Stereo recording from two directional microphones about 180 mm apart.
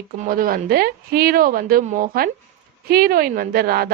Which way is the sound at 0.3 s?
50° right (ahead or behind).